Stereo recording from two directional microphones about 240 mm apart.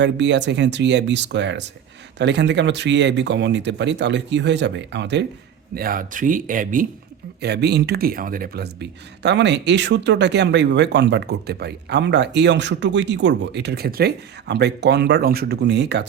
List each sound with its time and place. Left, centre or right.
0.0 s speech: right